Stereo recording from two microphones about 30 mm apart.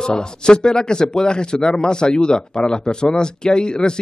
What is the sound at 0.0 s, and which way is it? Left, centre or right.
Speech, left.